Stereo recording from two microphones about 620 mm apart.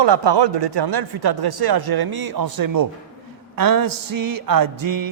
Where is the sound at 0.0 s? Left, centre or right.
Right.